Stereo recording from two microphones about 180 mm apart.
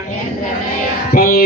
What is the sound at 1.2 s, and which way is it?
Music, 55° left (ahead or behind).